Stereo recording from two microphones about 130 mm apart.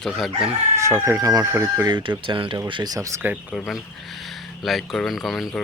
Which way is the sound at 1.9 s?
35° right (ahead or behind).